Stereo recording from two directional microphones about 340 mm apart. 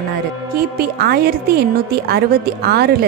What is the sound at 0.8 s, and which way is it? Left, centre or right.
A woman's voice, right.